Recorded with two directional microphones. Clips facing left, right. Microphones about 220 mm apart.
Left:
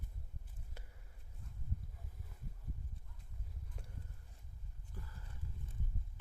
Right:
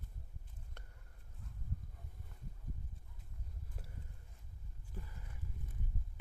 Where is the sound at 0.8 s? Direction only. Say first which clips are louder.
Left 2 dB; 5° left (ahead or behind).